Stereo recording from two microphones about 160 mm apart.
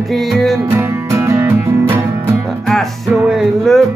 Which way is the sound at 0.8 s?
20° right (ahead or behind).